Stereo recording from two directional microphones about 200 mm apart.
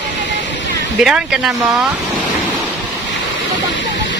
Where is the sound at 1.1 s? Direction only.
Centre (ahead or behind).